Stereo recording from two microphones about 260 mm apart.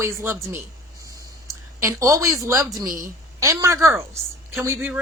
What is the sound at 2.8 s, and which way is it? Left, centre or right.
Speech, right.